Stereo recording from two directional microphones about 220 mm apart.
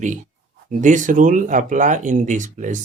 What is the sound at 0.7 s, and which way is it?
Speech, 35° right (ahead or behind).